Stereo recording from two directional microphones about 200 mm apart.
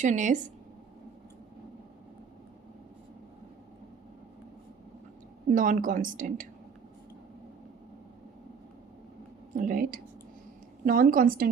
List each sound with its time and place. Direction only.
0.0 s a woman's voice: 40° right (ahead or behind)
5.5 s a woman's voice: 40° right (ahead or behind)
9.6 s a woman's voice: 45° right (ahead or behind)